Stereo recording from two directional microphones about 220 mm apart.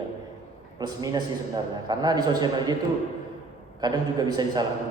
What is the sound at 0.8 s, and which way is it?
A man's voice, 15° right (ahead or behind).